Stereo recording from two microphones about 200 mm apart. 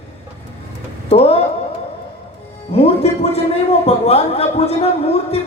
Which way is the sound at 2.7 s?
30° left (ahead or behind).